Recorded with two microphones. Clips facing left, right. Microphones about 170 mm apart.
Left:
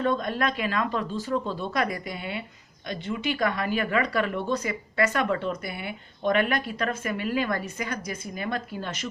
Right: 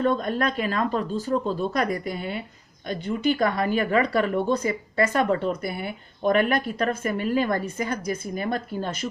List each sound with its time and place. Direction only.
0.0 s speech: 45° right (ahead or behind)
4.6 s speech: 30° right (ahead or behind)